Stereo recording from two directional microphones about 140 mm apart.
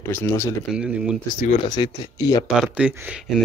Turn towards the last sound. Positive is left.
turn(degrees=-5)  # may be behind; listen again after turning